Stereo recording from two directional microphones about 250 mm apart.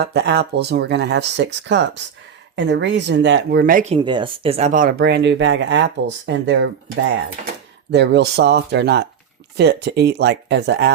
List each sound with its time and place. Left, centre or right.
0.0 s speech: right
7.9 s speech: right